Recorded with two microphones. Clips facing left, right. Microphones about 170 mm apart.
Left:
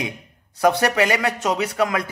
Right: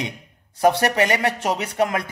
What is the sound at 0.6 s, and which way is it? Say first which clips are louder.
A man's voice: even; 30° right (ahead or behind).